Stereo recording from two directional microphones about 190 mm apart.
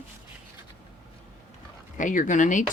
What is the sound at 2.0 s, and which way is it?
Speech, 45° left (ahead or behind).